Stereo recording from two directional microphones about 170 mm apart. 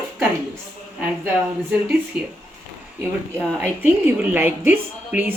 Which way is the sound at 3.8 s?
10° right (ahead or behind).